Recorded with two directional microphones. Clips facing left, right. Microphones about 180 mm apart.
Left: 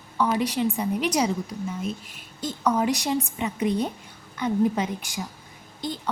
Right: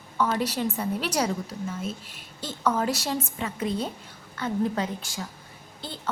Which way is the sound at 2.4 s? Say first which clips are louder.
Left 2 dB; 15° left (ahead or behind).